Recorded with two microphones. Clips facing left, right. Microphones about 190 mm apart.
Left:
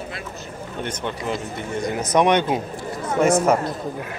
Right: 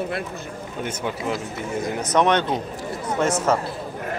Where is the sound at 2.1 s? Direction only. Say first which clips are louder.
Left 2 dB; 15° left (ahead or behind).